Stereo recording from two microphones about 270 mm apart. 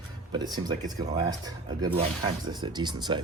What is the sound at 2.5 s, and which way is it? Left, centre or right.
Speech, centre.